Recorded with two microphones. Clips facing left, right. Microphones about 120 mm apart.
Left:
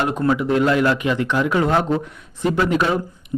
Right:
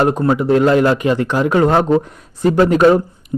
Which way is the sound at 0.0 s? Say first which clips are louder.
Right 5 dB; 35° right (ahead or behind).